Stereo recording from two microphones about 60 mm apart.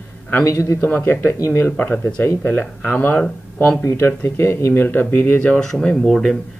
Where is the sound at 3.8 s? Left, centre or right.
Left.